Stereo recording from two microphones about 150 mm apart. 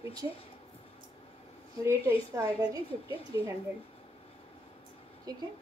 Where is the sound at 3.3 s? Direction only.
25° right (ahead or behind).